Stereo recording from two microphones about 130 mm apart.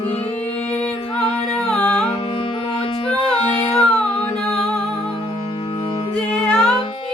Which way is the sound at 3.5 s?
40° left (ahead or behind).